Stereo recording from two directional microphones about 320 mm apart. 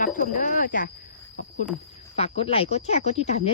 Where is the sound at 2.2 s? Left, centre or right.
Centre.